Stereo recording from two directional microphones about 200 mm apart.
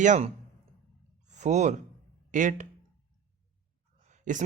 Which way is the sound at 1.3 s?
35° right (ahead or behind).